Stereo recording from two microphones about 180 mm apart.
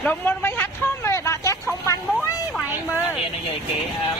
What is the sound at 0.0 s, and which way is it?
Speech, 10° left (ahead or behind).